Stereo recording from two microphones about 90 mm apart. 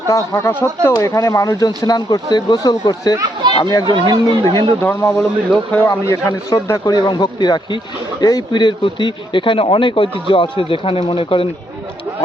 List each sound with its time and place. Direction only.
0.1 s speech: 30° left (ahead or behind)
3.8 s speech: 60° right (ahead or behind)
4.8 s speech: 20° left (ahead or behind)
5.8 s speech: 35° left (ahead or behind)
6.9 s a man's voice: 50° left (ahead or behind); by 11.4 s 85° left